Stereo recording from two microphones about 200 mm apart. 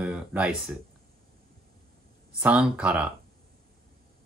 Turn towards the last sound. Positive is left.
turn(degrees=-5)  # may be behind; listen again after turning